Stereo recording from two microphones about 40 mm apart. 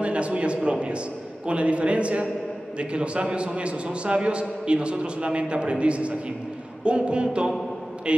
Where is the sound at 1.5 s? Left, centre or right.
Right.